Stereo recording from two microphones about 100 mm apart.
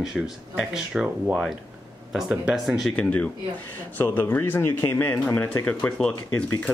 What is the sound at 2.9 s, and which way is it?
Speech, 15° left (ahead or behind).